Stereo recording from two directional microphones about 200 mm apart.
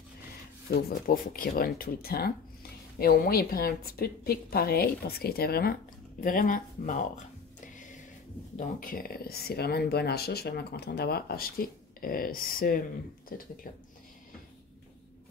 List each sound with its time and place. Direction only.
0.8 s speech: 45° left (ahead or behind)
7.6 s music: 40° left (ahead or behind)
8.5 s speech: 45° left (ahead or behind)